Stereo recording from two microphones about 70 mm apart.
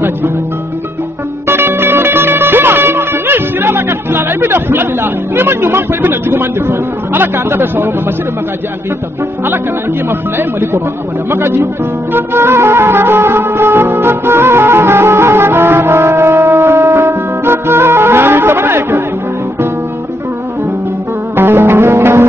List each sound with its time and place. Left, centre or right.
1.5 s music: right
11.2 s speech: right
12.1 s music: right
21.4 s music: right